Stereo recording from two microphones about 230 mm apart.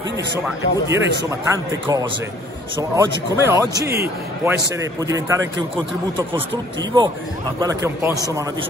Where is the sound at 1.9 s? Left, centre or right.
Centre.